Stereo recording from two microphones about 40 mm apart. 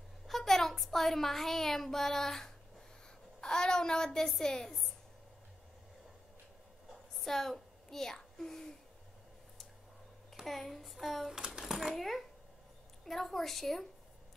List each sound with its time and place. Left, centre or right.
0.3 s a woman's voice: centre
4.6 s a woman's voice: centre
7.2 s a sound: centre
10.4 s speech: centre
11.3 s a sound: centre
12.0 s speech: centre